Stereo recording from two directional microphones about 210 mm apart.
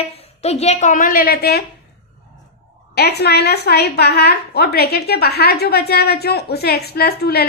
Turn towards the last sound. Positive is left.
turn(degrees=50)  # may be behind; listen again after turning